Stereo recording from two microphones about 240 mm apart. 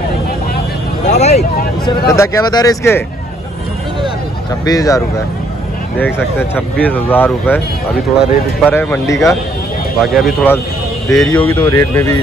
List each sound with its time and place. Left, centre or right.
1.0 s vehicle: left
1.9 s speech: centre
4.6 s speech: centre
10.0 s speech: centre